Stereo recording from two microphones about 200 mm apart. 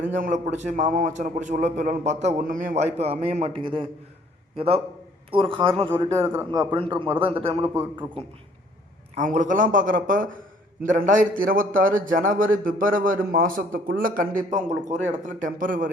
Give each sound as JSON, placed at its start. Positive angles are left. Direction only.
{"t": 0.0, "sound": "a man's voice", "side_deg": -40}
{"t": 6.0, "sound": "a man's voice", "side_deg": -15}
{"t": 7.6, "sound": "a man's voice", "side_deg": -10}
{"t": 9.1, "sound": "a man's voice", "side_deg": -40}